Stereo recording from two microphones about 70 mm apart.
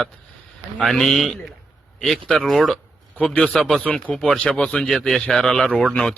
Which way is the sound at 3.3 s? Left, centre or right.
Centre.